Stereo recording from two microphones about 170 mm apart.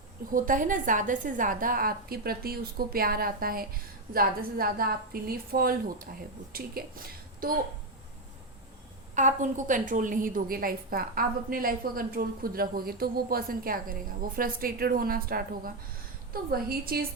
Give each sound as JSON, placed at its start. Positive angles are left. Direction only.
{"t": 0.3, "sound": "a woman's voice", "side_deg": -55}
{"t": 9.1, "sound": "a woman's voice", "side_deg": -45}